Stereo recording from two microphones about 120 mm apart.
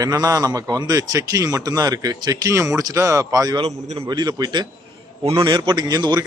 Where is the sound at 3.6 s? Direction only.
55° right (ahead or behind).